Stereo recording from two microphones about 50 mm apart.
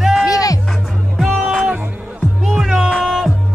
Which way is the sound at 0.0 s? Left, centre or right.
Centre.